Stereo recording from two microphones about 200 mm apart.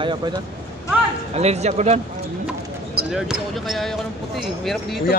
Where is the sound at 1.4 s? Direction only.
35° right (ahead or behind).